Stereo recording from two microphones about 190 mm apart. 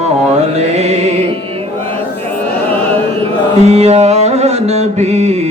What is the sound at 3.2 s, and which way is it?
Mantra, 35° right (ahead or behind).